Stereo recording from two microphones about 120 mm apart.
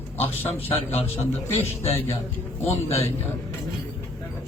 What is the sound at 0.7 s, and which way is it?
Speech, 60° left (ahead or behind).